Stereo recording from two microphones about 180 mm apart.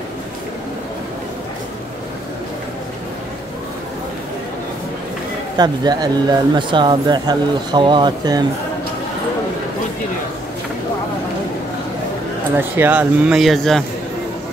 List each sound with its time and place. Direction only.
5.6 s speech: 20° right (ahead or behind)
12.5 s speech: 10° right (ahead or behind)